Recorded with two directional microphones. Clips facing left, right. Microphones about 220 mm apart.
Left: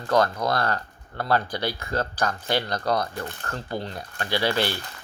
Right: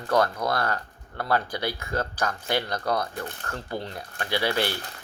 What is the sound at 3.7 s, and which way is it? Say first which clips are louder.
Speech: left 2 dB; 15° left (ahead or behind).